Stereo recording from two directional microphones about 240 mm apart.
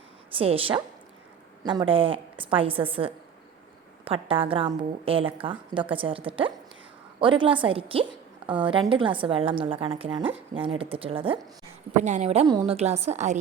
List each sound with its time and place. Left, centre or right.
0.3 s a woman's voice: right